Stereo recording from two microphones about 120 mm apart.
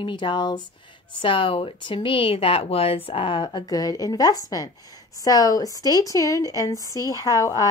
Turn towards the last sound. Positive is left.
turn(degrees=30)  # may be behind; listen again after turning